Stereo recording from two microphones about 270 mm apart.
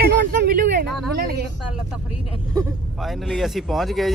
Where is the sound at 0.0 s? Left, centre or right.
Right.